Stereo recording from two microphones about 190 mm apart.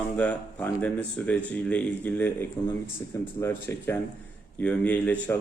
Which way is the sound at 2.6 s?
20° left (ahead or behind).